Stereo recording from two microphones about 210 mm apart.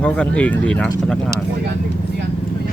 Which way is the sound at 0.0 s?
5° left (ahead or behind).